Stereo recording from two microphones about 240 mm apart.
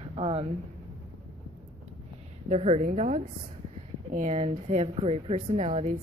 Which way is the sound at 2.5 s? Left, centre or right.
Right.